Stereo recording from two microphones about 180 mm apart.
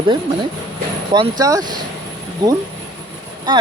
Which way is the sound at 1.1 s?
25° right (ahead or behind).